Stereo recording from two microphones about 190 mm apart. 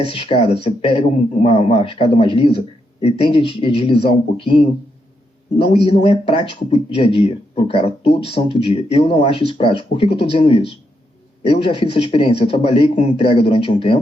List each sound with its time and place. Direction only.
0.1 s speech: 30° left (ahead or behind)
5.5 s speech: 30° left (ahead or behind)